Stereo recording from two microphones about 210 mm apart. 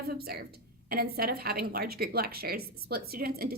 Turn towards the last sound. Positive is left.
turn(degrees=-45)  # may be behind; listen again after turning